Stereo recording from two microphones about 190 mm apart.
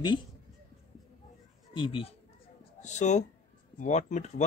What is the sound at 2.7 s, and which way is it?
Speech, 40° left (ahead or behind).